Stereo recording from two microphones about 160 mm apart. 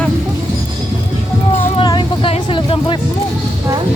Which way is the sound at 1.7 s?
30° left (ahead or behind).